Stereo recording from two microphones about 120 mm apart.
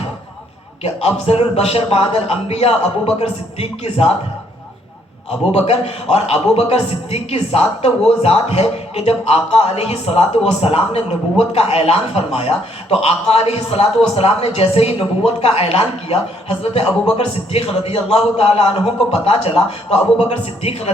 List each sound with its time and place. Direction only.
0.8 s a man's voice: 55° left (ahead or behind)
5.5 s a man's voice: 55° left (ahead or behind)